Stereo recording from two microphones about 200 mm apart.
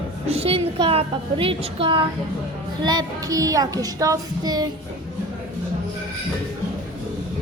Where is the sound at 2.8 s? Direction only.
20° right (ahead or behind).